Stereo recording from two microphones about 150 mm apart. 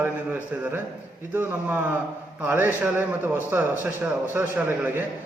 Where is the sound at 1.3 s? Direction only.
15° right (ahead or behind).